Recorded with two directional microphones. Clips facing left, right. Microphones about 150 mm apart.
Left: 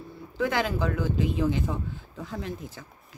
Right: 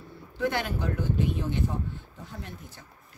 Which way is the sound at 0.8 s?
90° left.